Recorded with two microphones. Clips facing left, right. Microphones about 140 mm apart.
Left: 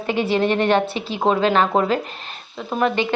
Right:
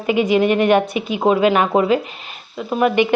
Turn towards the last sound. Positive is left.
turn(degrees=-10)  # may be behind; listen again after turning